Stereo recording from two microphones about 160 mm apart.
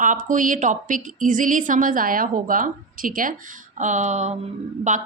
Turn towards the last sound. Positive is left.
turn(degrees=-50)  # may be behind; listen again after turning